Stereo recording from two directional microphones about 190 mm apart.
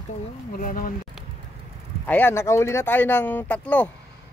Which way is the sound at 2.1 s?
10° left (ahead or behind).